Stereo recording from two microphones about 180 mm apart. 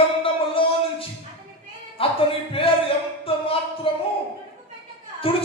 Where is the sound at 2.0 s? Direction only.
30° left (ahead or behind).